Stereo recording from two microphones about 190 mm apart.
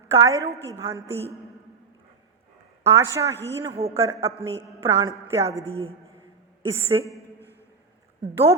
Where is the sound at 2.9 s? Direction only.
15° right (ahead or behind).